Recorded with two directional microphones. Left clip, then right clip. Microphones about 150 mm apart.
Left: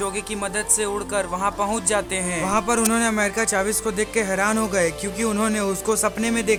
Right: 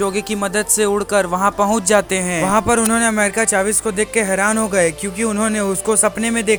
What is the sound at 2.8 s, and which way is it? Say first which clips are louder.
Speech: right 5 dB; 20° right (ahead or behind).